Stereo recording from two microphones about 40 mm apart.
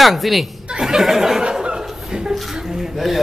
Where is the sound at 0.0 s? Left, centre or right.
Centre.